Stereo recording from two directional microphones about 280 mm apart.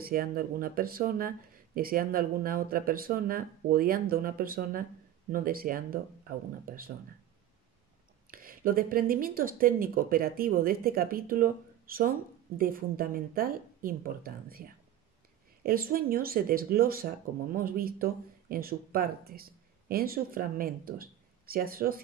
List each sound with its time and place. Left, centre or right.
0.0 s speech: right
8.3 s speech: right